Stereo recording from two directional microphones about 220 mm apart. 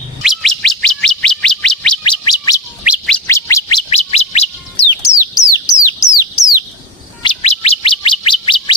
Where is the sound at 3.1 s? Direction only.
10° left (ahead or behind).